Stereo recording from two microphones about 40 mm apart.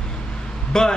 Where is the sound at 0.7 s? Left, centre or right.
Centre.